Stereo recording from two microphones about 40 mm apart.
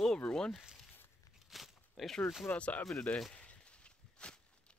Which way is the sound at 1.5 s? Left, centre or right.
Centre.